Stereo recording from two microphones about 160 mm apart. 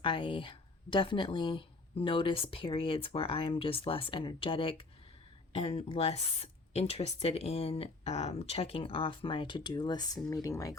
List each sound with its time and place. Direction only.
0.0 s a woman's voice: 30° left (ahead or behind)